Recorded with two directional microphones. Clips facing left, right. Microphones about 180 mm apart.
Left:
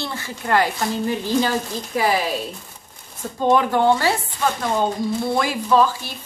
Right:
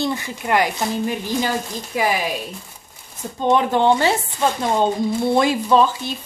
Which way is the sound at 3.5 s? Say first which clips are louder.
Right 1 dB; 25° right (ahead or behind).